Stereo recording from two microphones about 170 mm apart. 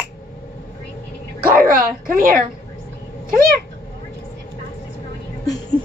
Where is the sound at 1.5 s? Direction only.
55° right (ahead or behind).